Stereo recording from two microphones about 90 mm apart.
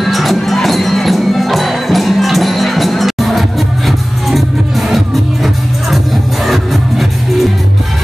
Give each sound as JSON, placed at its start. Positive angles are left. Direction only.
{"t": 0.0, "sound": "music", "side_deg": 0}